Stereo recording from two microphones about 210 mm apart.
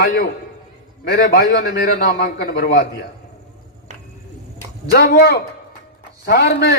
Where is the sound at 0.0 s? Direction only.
45° left (ahead or behind).